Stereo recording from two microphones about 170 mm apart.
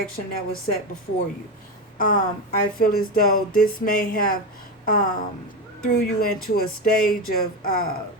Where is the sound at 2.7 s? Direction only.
60° left (ahead or behind).